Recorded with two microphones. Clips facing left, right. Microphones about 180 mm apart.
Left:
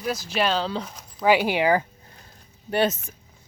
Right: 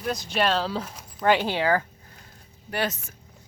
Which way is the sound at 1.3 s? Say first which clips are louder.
Left 3 dB; 10° left (ahead or behind).